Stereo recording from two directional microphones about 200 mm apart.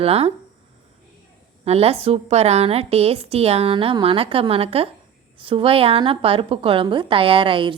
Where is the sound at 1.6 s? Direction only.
30° right (ahead or behind).